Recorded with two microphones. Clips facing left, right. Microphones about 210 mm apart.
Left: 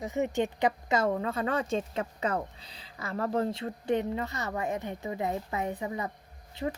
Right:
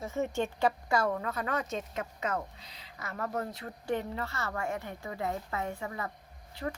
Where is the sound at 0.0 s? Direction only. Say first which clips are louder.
Left 3 dB; 15° left (ahead or behind).